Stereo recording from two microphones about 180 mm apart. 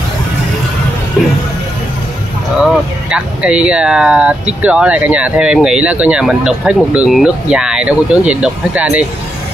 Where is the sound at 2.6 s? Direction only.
5° right (ahead or behind).